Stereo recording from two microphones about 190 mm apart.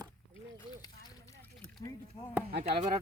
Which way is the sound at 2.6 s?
30° right (ahead or behind).